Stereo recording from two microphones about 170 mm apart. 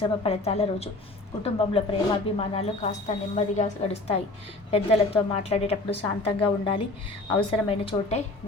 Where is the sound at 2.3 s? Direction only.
40° left (ahead or behind).